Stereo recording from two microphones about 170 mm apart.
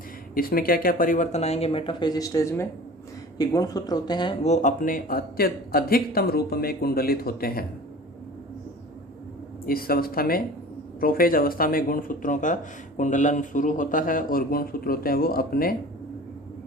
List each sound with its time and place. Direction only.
0.3 s speech: 60° left (ahead or behind); by 4.4 s 25° left (ahead or behind)
4.4 s a man's voice: 45° left (ahead or behind); by 7.6 s 60° left (ahead or behind)
9.6 s a man's voice: 60° left (ahead or behind)